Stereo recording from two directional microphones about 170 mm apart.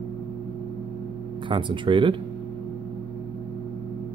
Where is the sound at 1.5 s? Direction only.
30° right (ahead or behind).